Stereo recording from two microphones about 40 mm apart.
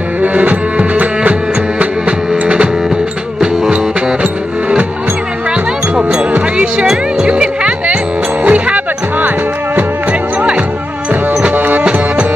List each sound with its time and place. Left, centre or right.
0.2 s music: right
3.3 s music: centre
3.7 s music: right
6.5 s music: right
11.4 s music: right